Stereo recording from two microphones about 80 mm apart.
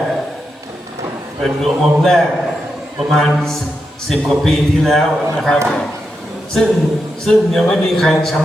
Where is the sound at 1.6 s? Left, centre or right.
Centre.